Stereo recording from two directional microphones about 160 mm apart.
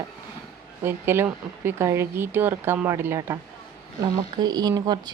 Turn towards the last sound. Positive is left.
turn(degrees=-25)  # may be behind; listen again after turning